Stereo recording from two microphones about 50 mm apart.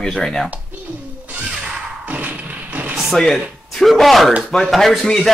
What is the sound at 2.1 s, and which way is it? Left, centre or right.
Thump, right.